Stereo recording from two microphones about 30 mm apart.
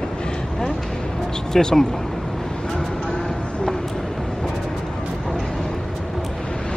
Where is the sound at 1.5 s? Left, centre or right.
Centre.